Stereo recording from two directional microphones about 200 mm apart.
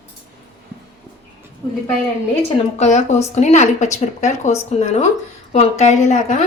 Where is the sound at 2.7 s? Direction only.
35° left (ahead or behind).